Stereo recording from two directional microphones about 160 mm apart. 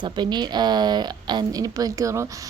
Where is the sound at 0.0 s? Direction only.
30° right (ahead or behind).